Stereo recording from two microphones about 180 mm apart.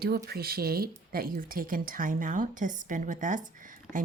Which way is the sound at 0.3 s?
60° right (ahead or behind).